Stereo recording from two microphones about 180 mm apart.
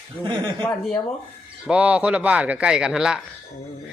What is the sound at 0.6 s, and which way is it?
Speech, 10° left (ahead or behind).